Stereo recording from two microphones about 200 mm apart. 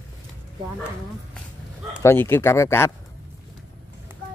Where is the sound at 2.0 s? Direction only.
10° left (ahead or behind).